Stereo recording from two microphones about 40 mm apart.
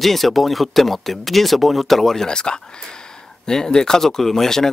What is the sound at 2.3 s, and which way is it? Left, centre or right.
Speech, centre.